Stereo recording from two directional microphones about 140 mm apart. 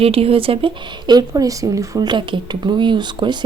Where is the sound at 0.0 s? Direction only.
45° right (ahead or behind).